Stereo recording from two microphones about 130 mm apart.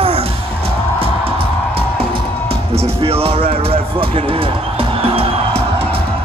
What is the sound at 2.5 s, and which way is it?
Music, 45° right (ahead or behind).